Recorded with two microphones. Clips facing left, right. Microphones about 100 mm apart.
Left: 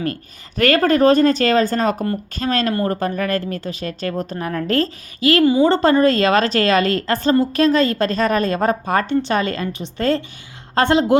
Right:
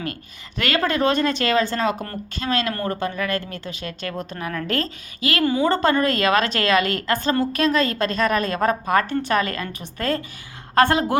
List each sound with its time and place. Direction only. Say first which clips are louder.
0.0 s speech: left 6 dB; 40° left (ahead or behind)
5.4 s a woman's voice: left 5 dB; 10° left (ahead or behind)
5.6 s a woman's voice: left 5 dB; 30° left (ahead or behind)